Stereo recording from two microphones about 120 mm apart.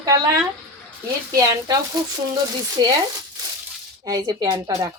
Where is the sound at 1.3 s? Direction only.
25° right (ahead or behind).